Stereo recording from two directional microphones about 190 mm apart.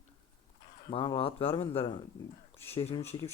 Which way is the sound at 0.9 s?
25° left (ahead or behind).